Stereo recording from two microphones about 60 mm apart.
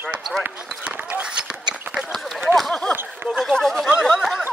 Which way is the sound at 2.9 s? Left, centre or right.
Right.